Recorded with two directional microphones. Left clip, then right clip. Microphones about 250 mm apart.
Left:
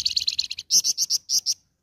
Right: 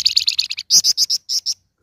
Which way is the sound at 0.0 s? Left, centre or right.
Right.